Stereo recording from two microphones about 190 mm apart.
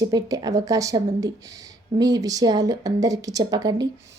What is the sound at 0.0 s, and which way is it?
Speech, 20° right (ahead or behind).